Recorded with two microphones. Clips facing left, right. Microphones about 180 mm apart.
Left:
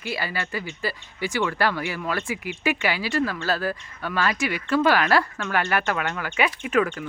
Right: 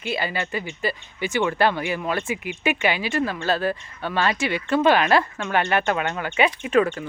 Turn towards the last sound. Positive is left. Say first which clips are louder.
# right 3 dB
turn(degrees=-30)  # may be behind; listen again after turning